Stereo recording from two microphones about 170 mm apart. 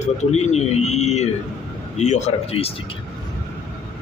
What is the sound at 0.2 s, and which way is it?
Speech, 40° left (ahead or behind).